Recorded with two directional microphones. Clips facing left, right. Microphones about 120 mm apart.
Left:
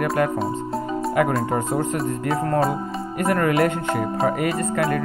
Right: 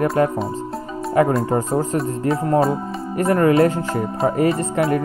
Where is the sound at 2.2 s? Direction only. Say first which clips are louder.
Right 4 dB; 20° right (ahead or behind).